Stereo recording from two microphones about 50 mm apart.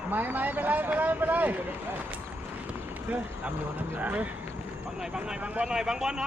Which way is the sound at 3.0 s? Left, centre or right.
Right.